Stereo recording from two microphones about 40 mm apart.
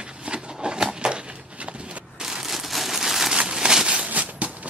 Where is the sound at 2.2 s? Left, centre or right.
Centre.